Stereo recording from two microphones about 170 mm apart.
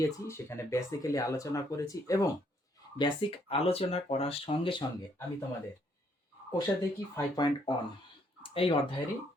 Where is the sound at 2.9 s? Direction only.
35° left (ahead or behind).